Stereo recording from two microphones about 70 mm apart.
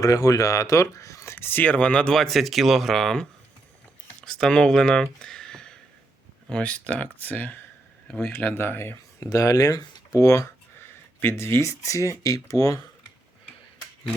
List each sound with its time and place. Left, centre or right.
0.0 s speech: left; by 2.1 s centre
2.1 s speech: centre
4.3 s speech: centre; by 7.6 s left
8.0 s speech: centre
8.4 s speech: left
9.2 s speech: left
11.2 s speech: left